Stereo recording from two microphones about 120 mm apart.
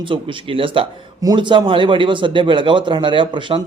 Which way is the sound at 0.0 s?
45° right (ahead or behind).